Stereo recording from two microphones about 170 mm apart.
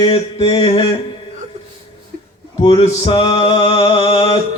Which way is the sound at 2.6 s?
30° left (ahead or behind).